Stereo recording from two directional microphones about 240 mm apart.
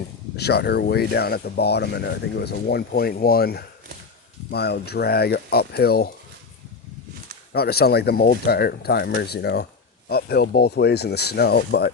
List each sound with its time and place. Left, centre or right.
0.3 s speech: left
7.5 s speech: left